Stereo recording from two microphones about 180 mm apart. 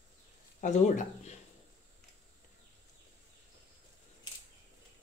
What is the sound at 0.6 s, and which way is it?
Speech, 40° left (ahead or behind).